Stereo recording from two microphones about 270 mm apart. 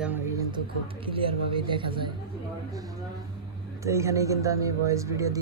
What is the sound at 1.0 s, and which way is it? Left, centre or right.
Speech, centre.